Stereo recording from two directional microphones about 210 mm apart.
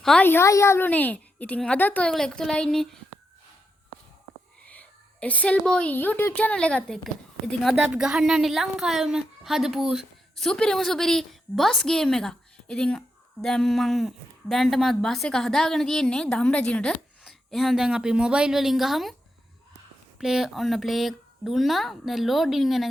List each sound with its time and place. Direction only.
0.0 s a woman's voice: 5° left (ahead or behind)
4.6 s a woman's voice: 5° left (ahead or behind)
20.1 s a woman's voice: centre (ahead or behind)